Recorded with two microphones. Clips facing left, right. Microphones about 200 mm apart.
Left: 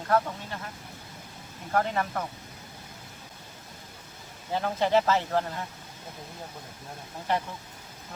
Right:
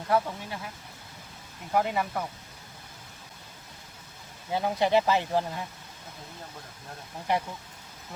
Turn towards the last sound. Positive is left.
turn(degrees=-15)  # may be behind; listen again after turning